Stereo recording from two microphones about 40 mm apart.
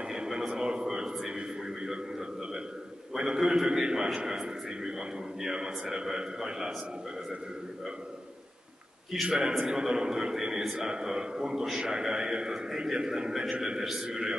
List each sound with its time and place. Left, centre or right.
0.1 s a sound: centre
3.2 s a man's voice: centre
9.2 s a man's voice: centre